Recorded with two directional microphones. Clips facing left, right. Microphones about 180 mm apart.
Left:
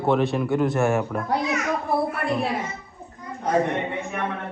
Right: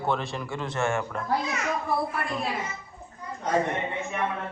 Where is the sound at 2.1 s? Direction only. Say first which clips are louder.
Left 6 dB; 65° left (ahead or behind).